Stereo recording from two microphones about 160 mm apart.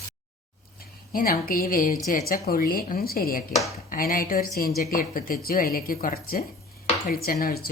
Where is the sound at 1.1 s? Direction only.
65° left (ahead or behind).